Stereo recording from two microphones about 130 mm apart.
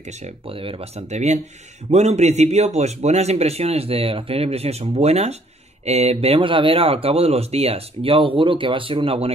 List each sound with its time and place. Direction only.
0.2 s speech: 45° right (ahead or behind)